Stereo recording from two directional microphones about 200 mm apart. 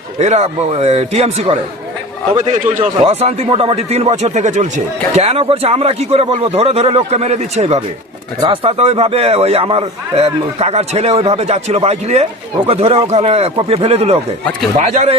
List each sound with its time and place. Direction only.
0.2 s a man's voice: 35° right (ahead or behind)